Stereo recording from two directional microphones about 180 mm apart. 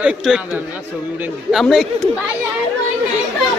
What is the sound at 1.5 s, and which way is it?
Speech, centre (ahead or behind).